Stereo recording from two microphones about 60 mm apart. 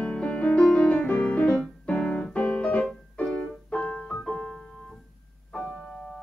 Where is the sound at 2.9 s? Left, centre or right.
Centre.